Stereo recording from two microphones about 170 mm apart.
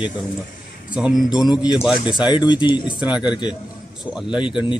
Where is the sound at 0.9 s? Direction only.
5° right (ahead or behind).